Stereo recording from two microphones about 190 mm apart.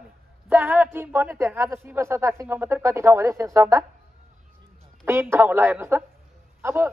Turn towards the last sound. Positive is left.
turn(degrees=-10)  # may be behind; listen again after turning